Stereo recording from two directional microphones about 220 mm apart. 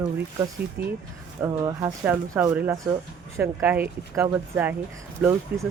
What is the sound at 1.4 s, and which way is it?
Speech, 15° right (ahead or behind).